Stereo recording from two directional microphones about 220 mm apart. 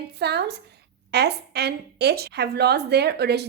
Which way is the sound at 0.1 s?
50° right (ahead or behind).